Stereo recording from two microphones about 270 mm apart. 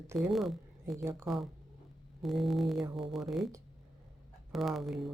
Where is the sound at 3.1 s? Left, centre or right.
Centre.